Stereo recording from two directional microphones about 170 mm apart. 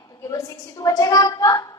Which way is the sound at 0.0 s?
20° left (ahead or behind).